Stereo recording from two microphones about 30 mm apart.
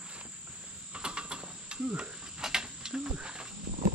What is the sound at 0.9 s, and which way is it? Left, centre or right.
Cricket, right.